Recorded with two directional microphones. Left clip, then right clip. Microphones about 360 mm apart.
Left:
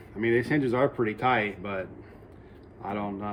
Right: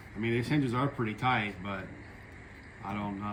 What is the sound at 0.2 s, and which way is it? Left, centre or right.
Speech, centre.